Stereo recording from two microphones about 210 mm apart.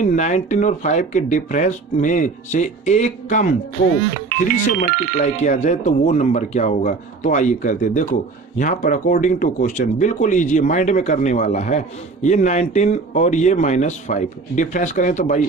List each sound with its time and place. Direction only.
0.0 s speech: 35° left (ahead or behind)